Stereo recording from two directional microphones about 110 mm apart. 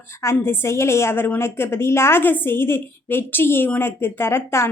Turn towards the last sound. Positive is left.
turn(degrees=25)  # may be behind; listen again after turning